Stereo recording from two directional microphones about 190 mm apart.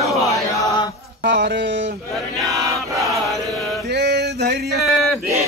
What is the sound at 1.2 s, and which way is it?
Music, 65° right (ahead or behind).